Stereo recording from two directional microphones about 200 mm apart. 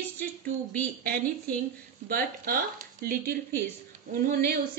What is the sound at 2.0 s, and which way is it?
Speech, 45° right (ahead or behind).